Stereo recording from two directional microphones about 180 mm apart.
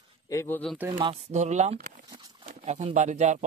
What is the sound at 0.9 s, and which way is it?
Speech, 35° right (ahead or behind).